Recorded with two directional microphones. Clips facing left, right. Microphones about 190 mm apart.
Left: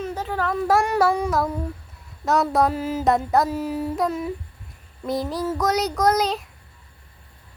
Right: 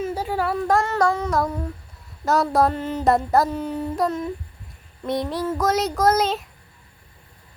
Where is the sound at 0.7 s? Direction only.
10° left (ahead or behind).